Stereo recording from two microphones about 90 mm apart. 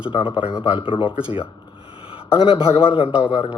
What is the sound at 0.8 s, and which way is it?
Speech, 70° left (ahead or behind).